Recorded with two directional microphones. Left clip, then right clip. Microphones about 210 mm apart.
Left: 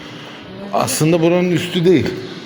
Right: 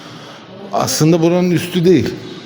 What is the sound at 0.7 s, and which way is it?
Speech, 35° right (ahead or behind).